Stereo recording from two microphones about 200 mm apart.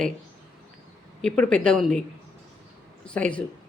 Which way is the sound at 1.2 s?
5° left (ahead or behind).